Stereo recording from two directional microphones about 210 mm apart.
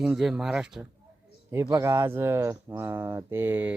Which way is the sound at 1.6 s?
15° right (ahead or behind).